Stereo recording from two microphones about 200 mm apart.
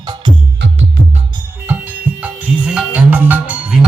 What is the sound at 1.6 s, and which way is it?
Music, 10° right (ahead or behind).